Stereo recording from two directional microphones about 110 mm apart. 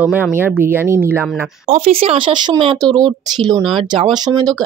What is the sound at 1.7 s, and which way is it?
Speech, 65° right (ahead or behind).